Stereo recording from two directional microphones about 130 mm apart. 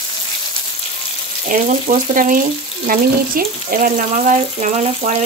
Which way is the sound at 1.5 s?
85° right.